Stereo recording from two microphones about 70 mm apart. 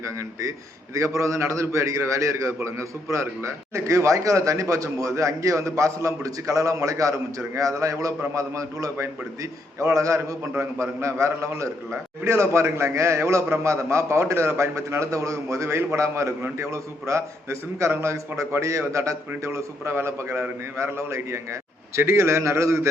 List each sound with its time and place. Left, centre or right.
0.2 s a man's voice: right